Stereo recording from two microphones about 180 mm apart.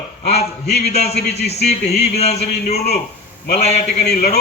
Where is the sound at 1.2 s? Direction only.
65° left (ahead or behind).